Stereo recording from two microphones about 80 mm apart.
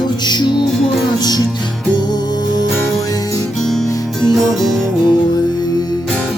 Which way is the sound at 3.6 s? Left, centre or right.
Centre.